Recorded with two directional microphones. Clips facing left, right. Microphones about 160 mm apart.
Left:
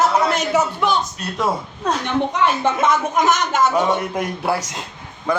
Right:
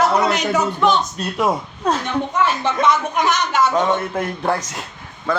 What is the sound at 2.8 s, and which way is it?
Speech, 45° left (ahead or behind).